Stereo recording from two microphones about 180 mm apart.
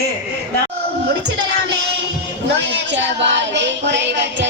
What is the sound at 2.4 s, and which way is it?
Speech, 80° right.